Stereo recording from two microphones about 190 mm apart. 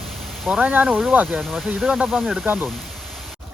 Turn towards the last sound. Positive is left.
turn(degrees=0)  # may be behind; listen again after turning